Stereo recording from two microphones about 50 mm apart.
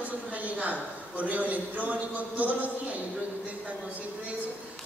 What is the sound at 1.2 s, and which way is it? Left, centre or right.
Speech, right.